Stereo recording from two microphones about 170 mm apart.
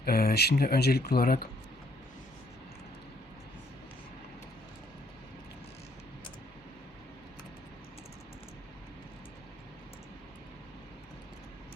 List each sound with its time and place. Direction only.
0.0 s speech: 60° left (ahead or behind)